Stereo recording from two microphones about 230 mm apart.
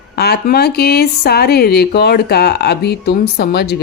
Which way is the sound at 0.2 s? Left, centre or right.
Left.